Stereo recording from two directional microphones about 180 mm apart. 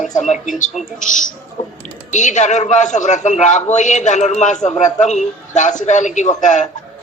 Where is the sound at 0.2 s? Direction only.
45° left (ahead or behind).